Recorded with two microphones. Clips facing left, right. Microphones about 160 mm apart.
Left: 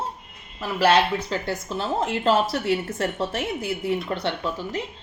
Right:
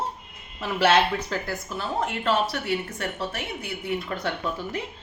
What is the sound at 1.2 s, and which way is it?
Speech, 20° left (ahead or behind).